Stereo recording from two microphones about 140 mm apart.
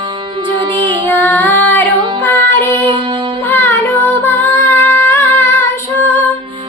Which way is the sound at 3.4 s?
15° left (ahead or behind).